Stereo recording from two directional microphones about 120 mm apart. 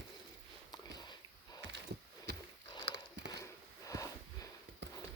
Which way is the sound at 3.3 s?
30° left (ahead or behind).